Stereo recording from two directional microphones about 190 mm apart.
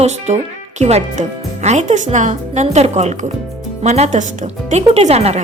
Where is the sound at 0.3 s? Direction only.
35° right (ahead or behind).